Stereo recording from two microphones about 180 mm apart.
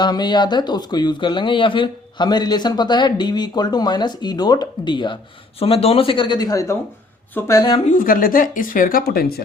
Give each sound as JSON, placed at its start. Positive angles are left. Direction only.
{"t": 0.0, "sound": "speech", "side_deg": 25}
{"t": 7.9, "sound": "speech", "side_deg": 50}